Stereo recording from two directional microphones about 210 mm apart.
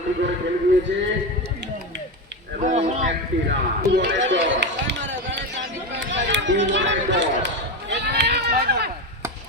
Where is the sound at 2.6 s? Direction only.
35° right (ahead or behind).